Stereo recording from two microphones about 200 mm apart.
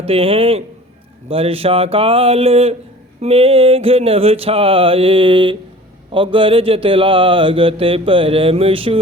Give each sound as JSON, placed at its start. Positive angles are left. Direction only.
{"t": 0.0, "sound": "speech", "side_deg": -30}